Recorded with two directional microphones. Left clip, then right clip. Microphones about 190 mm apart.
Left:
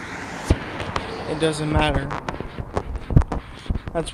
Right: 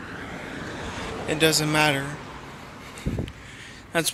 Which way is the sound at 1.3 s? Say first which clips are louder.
Right 2 dB; 10° right (ahead or behind).